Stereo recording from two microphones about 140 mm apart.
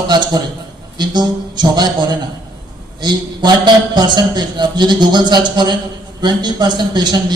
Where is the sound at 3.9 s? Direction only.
30° right (ahead or behind).